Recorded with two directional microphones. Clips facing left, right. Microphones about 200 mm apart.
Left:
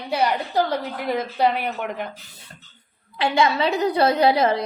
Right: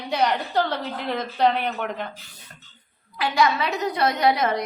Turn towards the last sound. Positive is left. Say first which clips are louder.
# left 3 dB
turn(degrees=30)  # may be behind; listen again after turning